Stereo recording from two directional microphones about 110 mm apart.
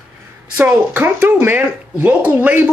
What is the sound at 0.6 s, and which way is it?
Speech, 15° right (ahead or behind).